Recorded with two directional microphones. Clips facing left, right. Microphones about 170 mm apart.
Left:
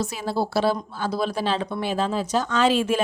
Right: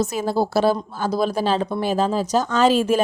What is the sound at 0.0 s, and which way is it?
Speech, 45° right (ahead or behind).